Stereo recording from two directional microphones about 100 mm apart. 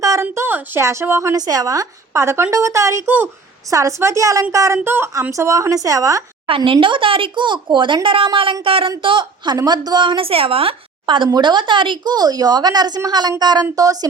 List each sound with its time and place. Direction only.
0.0 s a woman's voice: 30° right (ahead or behind)
6.7 s a woman's voice: 60° right (ahead or behind)
11.0 s a woman's voice: 55° right (ahead or behind); by 14.1 s 40° right (ahead or behind)